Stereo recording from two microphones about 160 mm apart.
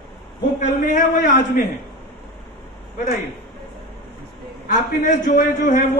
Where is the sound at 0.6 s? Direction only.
55° left (ahead or behind).